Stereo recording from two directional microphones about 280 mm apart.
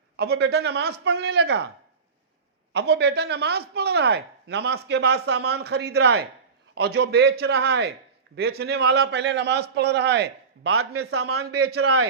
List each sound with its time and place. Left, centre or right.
0.2 s speech: right
2.7 s a man's voice: right